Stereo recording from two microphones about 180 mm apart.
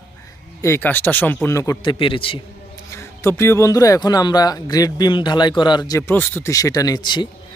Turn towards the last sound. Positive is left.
turn(degrees=25)  # may be behind; listen again after turning